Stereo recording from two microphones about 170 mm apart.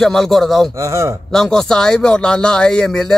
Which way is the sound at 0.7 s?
15° right (ahead or behind).